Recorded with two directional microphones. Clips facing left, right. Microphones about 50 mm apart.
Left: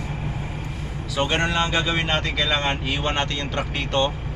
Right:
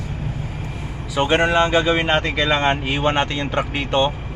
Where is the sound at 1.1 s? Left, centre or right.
Centre.